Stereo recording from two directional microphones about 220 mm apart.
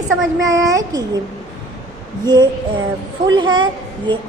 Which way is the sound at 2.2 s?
20° right (ahead or behind).